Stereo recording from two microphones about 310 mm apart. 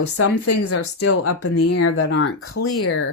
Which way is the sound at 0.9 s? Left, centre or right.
Left.